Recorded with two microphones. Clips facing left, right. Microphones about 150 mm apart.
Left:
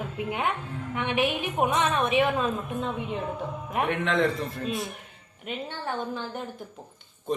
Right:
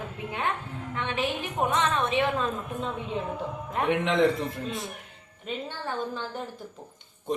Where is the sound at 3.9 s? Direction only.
20° right (ahead or behind).